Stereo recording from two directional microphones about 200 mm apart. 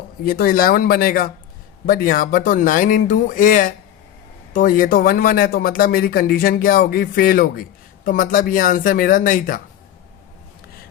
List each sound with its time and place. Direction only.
0.3 s speech: 45° left (ahead or behind)